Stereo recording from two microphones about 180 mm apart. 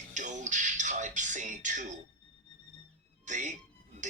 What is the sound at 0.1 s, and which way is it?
Music, 40° right (ahead or behind).